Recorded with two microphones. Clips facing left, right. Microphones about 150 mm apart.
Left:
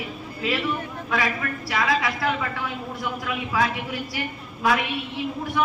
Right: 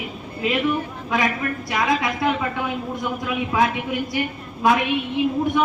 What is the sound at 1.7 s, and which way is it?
Speech, 20° right (ahead or behind).